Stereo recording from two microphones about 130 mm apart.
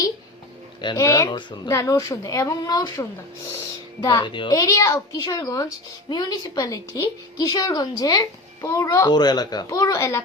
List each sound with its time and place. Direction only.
0.8 s speech: 35° left (ahead or behind)
1.0 s speech: 25° left (ahead or behind)
1.7 s a woman's voice: 25° left (ahead or behind)